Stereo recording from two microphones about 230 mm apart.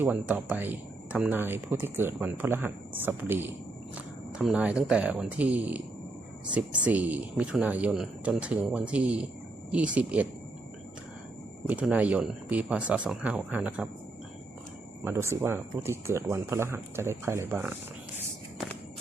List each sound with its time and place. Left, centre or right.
0.0 s speech: centre
11.7 s speech: centre
15.0 s speech: centre